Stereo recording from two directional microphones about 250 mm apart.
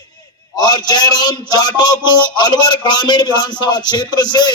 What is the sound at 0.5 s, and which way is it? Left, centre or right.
Speech, centre.